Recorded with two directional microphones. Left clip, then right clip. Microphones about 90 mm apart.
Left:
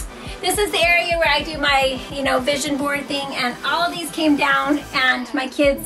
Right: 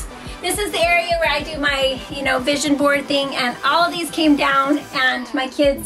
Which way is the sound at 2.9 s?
20° right (ahead or behind).